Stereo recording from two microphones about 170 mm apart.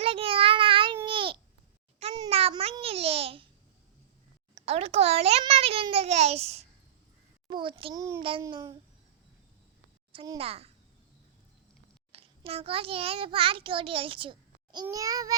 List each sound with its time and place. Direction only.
0.0 s child singing: 30° right (ahead or behind)
1.0 s babbling: 30° right (ahead or behind)
4.5 s a child's voice: 35° right (ahead or behind)
7.9 s a child's voice: 15° right (ahead or behind)
8.2 s a child's voice: 30° right (ahead or behind)
10.1 s a child's voice: 30° right (ahead or behind)
12.1 s a child's voice: 35° right (ahead or behind)